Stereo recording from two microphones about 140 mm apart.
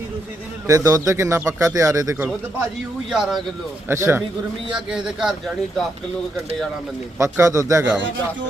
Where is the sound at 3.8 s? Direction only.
20° right (ahead or behind).